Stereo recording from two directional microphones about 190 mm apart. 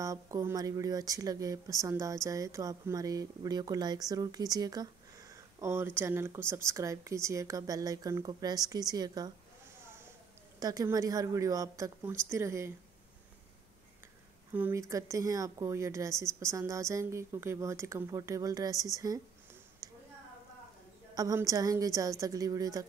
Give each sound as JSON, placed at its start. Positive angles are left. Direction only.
{"t": 0.0, "sound": "speech", "side_deg": -15}
{"t": 10.6, "sound": "speech", "side_deg": -20}
{"t": 14.5, "sound": "speech", "side_deg": -10}
{"t": 19.8, "sound": "a sound", "side_deg": -20}
{"t": 21.1, "sound": "speech", "side_deg": -20}